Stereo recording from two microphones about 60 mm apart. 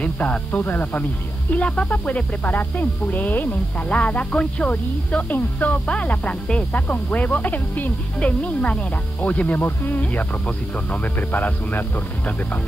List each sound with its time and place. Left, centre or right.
0.0 s speech: left